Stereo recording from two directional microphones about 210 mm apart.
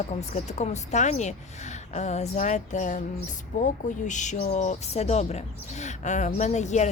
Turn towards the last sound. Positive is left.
turn(degrees=35)  # may be behind; listen again after turning